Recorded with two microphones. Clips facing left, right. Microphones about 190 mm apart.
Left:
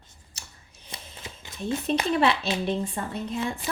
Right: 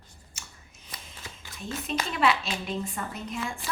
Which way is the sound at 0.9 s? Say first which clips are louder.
Left 3 dB; 25° left (ahead or behind).